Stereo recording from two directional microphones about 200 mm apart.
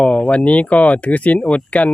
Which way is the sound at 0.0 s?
5° left (ahead or behind).